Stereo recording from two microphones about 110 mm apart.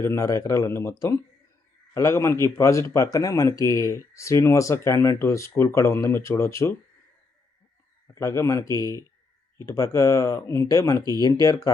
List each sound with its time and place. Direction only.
0.0 s speech: 25° left (ahead or behind)
8.0 s speech: 25° left (ahead or behind)